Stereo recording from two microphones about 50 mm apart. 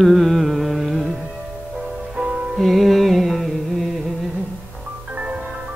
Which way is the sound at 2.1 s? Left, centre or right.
Centre.